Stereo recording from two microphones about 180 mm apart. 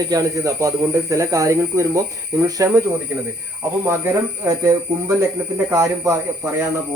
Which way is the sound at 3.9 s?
15° right (ahead or behind).